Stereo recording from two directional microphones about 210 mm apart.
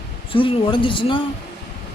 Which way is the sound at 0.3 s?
25° left (ahead or behind).